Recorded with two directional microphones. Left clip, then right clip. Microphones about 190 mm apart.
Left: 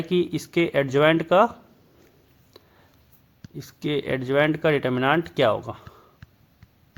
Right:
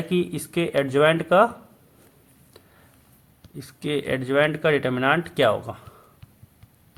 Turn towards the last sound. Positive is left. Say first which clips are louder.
# even
turn(degrees=35)  # may be behind; listen again after turning